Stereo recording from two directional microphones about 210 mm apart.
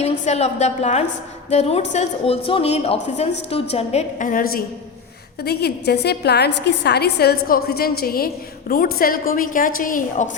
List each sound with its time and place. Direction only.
0.0 s a woman's voice: 30° left (ahead or behind)